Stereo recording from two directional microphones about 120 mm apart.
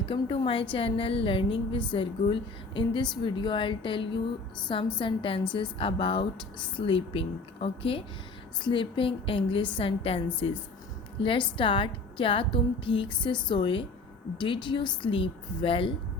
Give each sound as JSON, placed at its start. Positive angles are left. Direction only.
{"t": 0.0, "sound": "a woman's voice", "side_deg": 45}